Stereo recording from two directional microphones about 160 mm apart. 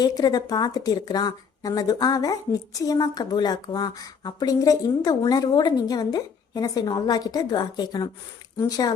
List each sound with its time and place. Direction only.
0.0 s a woman's voice: 25° left (ahead or behind)